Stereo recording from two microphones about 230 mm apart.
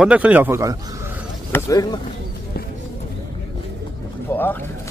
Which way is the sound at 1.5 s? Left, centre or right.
Centre.